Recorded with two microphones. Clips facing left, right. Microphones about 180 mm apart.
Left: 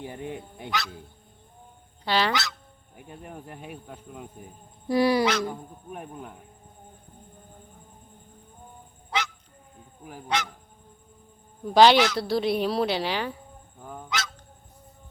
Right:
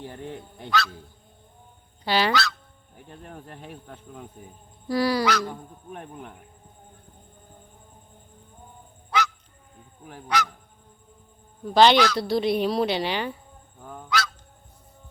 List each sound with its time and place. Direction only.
0.0 s speech: 10° left (ahead or behind)
2.0 s a woman's voice: 5° right (ahead or behind)
2.3 s speech: 20° left (ahead or behind)
4.9 s speech: 20° left (ahead or behind)
5.5 s speech: 5° left (ahead or behind)
9.0 s goose: 25° left (ahead or behind)
10.0 s speech: 10° left (ahead or behind)
10.2 s speech: 25° left (ahead or behind)
11.7 s a woman's voice: 10° left (ahead or behind)
13.8 s goose: 10° left (ahead or behind)